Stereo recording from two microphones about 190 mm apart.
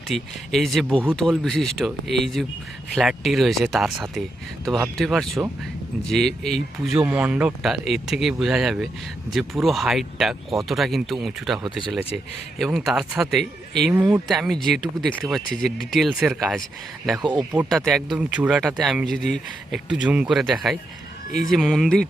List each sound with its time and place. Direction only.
0.1 s speech: centre (ahead or behind)
17.2 s speech: 25° right (ahead or behind)
17.6 s speech: centre (ahead or behind)